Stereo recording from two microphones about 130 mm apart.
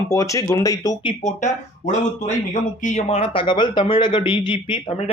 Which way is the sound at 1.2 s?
65° left (ahead or behind).